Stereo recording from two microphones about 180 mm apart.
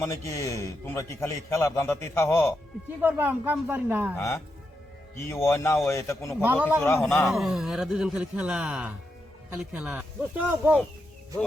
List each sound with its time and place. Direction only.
0.0 s a man's voice: 15° left (ahead or behind)
3.0 s speech: 10° right (ahead or behind)
4.2 s a man's voice: 15° left (ahead or behind)
6.4 s a man's voice: 10° right (ahead or behind)